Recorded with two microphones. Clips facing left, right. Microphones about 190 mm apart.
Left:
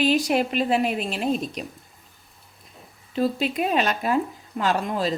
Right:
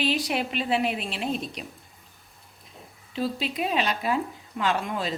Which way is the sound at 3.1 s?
50° left (ahead or behind).